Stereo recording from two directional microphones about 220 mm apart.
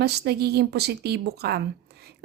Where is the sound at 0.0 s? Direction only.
45° right (ahead or behind).